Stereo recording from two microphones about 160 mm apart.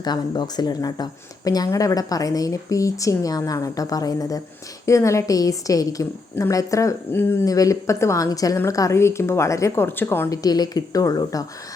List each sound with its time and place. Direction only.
0.0 s a woman's voice: 25° left (ahead or behind)